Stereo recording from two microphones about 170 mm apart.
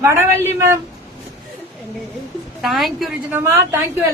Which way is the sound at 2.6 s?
Centre (ahead or behind).